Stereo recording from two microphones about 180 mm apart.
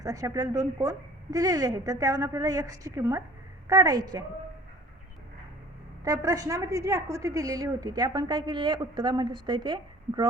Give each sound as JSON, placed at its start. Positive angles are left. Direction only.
{"t": 0.0, "sound": "a woman's voice", "side_deg": -20}
{"t": 6.1, "sound": "a woman's voice", "side_deg": -20}